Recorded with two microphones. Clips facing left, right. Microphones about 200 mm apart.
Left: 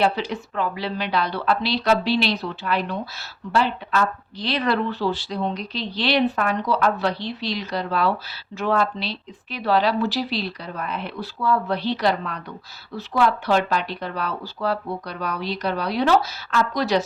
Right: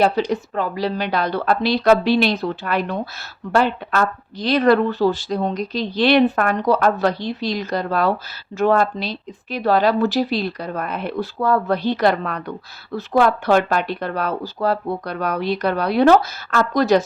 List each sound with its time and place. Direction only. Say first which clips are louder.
0.0 s speech: right 4 dB; 45° right (ahead or behind)